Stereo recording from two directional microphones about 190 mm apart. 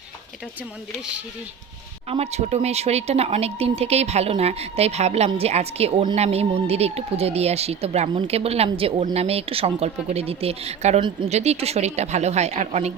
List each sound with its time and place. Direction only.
2.0 s speech: 35° right (ahead or behind)